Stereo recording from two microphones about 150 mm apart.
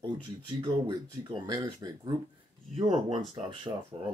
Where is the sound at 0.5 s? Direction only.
30° right (ahead or behind).